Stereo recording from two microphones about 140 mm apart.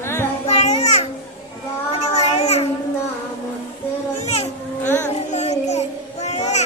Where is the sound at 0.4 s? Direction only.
50° left (ahead or behind).